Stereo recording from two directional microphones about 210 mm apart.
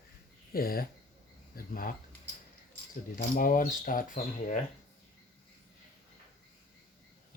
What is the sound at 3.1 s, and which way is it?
Speech, 40° left (ahead or behind).